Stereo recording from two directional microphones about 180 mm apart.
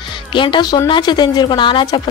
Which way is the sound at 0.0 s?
25° left (ahead or behind).